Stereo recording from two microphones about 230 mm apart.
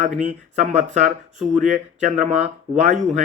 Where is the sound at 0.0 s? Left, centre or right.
Right.